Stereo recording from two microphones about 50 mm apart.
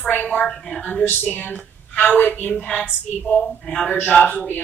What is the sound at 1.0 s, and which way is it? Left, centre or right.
A woman's voice, left.